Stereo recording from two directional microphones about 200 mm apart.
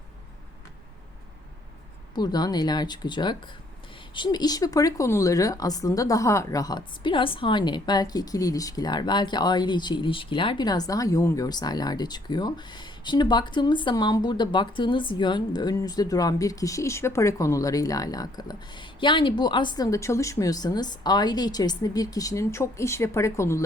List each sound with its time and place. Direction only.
2.1 s speech: 20° left (ahead or behind)